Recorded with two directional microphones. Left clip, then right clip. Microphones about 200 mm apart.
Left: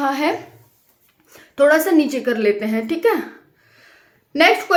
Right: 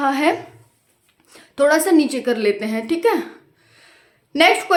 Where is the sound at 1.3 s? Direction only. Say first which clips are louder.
Left 2 dB; centre (ahead or behind).